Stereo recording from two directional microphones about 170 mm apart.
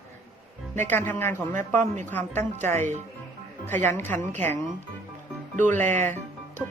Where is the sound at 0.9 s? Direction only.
10° left (ahead or behind).